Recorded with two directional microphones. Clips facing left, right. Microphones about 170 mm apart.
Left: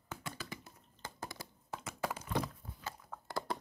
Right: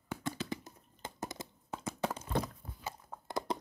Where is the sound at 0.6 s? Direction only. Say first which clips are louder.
Right 3 dB; 20° right (ahead or behind).